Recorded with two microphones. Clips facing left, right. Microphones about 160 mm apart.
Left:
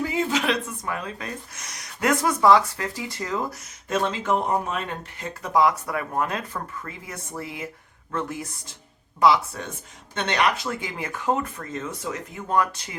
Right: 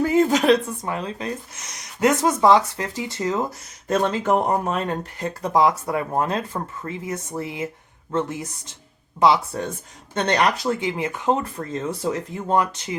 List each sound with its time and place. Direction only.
0.0 s speech: 45° right (ahead or behind); by 3.4 s 25° right (ahead or behind)
3.8 s speech: 45° right (ahead or behind)
10.8 s speech: 20° right (ahead or behind)